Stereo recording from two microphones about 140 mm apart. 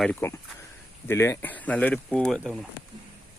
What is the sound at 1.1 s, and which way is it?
Speech, 20° left (ahead or behind).